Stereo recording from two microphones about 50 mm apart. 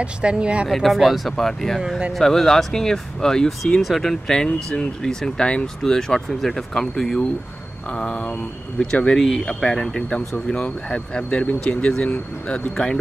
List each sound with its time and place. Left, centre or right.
0.0 s speech: right
0.7 s speech: centre; by 9.1 s left
9.1 s speech: centre